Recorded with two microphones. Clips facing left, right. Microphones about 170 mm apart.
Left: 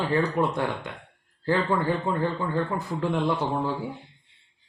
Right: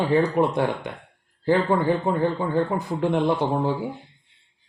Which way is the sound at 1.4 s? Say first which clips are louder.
Right 4 dB; 20° right (ahead or behind).